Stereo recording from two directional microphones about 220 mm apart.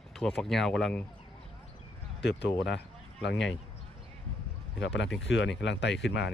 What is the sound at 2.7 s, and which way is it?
Speech, 50° left (ahead or behind).